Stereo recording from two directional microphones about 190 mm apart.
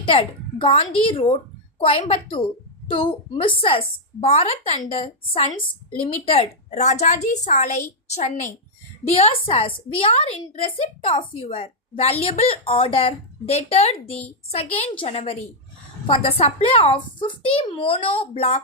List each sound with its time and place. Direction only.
0.0 s a child's voice: 25° left (ahead or behind)